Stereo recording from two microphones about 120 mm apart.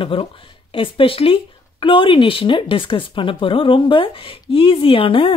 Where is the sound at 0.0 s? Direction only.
50° left (ahead or behind).